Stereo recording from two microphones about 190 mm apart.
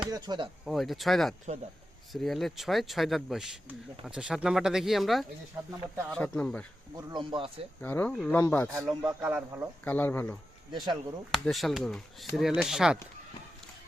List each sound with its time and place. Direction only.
0.1 s speech: 20° right (ahead or behind)
0.6 s speech: centre (ahead or behind)
6.9 s speech: 25° right (ahead or behind)
7.8 s speech: 10° left (ahead or behind)
8.9 s speech: 5° right (ahead or behind)
9.8 s speech: 10° left (ahead or behind)
10.7 s speech: 25° right (ahead or behind)
11.3 s speech: centre (ahead or behind)